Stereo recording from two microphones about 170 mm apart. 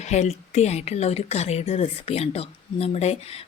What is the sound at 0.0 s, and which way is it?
Speech, 40° left (ahead or behind).